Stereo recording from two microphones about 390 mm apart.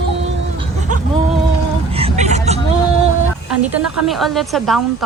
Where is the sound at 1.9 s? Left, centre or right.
Centre.